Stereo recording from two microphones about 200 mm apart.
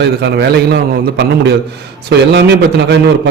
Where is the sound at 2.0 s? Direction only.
60° right (ahead or behind).